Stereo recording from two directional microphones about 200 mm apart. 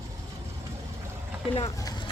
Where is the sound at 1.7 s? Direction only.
20° left (ahead or behind).